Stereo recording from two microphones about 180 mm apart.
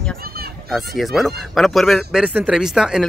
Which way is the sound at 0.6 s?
Centre (ahead or behind).